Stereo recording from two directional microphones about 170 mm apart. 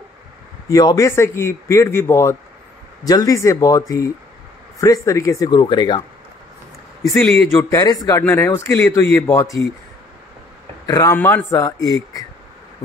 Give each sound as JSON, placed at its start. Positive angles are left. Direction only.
{"t": 0.7, "sound": "speech", "side_deg": 20}
{"t": 7.2, "sound": "a man's voice", "side_deg": 0}
{"t": 7.5, "sound": "speech", "side_deg": 20}
{"t": 10.9, "sound": "speech", "side_deg": 20}